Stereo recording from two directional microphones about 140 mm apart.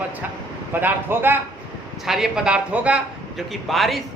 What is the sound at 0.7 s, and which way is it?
Speech, 15° right (ahead or behind).